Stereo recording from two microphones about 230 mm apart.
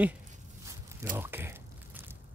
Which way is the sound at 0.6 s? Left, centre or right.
Centre.